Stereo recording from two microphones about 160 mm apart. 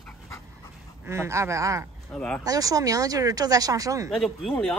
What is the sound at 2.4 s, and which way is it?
Speech, 20° right (ahead or behind).